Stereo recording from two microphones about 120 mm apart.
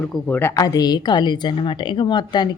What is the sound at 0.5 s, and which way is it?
A woman's voice, 30° left (ahead or behind).